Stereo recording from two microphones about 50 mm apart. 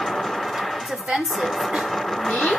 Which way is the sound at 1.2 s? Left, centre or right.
Centre.